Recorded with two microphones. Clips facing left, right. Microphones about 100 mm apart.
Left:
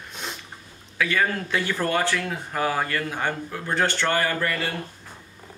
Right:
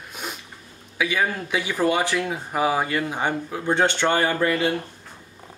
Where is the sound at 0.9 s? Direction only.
10° right (ahead or behind).